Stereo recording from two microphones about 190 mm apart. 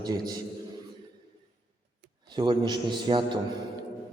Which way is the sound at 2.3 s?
25° right (ahead or behind).